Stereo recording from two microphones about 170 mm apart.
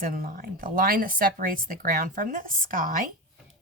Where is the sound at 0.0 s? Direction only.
55° right (ahead or behind).